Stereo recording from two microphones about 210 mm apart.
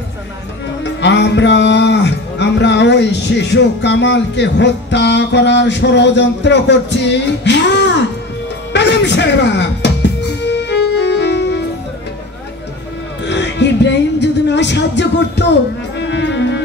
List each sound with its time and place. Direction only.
0.8 s speech: 55° left (ahead or behind)
8.7 s music: 55° left (ahead or behind)
13.3 s music: 55° left (ahead or behind)